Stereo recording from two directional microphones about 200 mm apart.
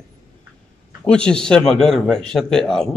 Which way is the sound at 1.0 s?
5° left (ahead or behind).